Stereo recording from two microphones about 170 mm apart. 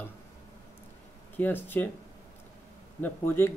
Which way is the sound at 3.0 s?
15° left (ahead or behind).